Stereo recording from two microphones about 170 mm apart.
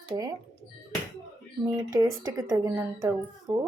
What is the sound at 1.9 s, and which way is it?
A woman's voice, 20° right (ahead or behind).